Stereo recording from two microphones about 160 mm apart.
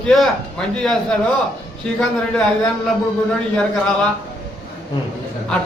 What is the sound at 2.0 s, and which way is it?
Speech, 5° left (ahead or behind).